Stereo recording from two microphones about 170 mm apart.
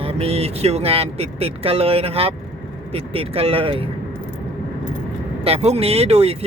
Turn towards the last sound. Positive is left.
turn(degrees=-35)  # may be behind; listen again after turning